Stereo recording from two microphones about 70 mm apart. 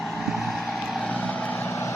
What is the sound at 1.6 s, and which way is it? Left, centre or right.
Vehicle, left.